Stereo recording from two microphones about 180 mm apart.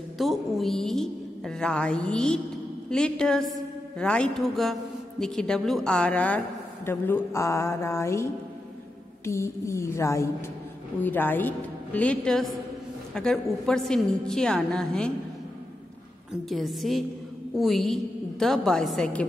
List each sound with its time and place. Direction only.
0.2 s a woman's voice: centre (ahead or behind)
16.4 s a woman's voice: centre (ahead or behind)